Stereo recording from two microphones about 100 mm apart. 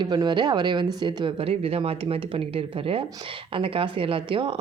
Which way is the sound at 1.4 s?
80° right.